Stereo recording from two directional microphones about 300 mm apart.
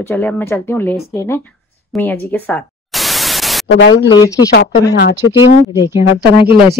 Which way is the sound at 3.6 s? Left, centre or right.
Left.